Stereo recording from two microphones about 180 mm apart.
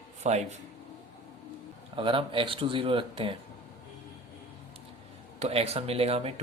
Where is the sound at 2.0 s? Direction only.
30° right (ahead or behind).